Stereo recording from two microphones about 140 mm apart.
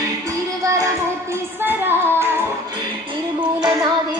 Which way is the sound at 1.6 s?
15° right (ahead or behind).